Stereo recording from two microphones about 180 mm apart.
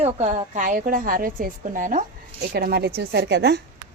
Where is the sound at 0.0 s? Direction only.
40° right (ahead or behind).